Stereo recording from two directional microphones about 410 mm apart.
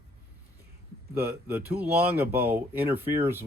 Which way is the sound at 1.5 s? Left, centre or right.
Centre.